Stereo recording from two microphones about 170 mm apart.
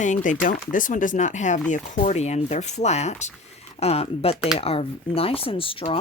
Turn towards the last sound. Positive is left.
turn(degrees=30)  # may be behind; listen again after turning